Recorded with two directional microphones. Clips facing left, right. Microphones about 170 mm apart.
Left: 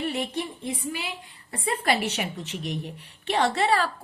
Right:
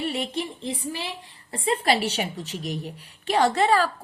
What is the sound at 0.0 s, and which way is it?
A woman's voice, 30° right (ahead or behind).